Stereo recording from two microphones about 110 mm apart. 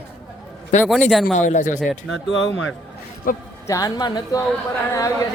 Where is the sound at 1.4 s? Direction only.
90° left.